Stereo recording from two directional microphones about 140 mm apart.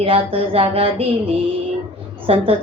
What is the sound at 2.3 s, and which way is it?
Speech, 45° right (ahead or behind).